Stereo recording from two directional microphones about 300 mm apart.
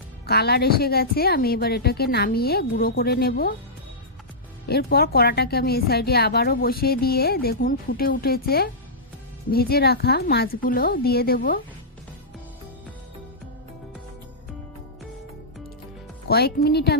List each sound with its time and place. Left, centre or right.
0.3 s a woman's voice: left
4.7 s a woman's voice: left
16.3 s a woman's voice: left